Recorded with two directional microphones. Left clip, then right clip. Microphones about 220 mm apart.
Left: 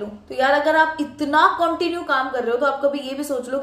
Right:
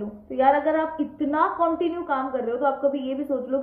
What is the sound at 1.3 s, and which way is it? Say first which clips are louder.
Speech: left 6 dB; 20° left (ahead or behind).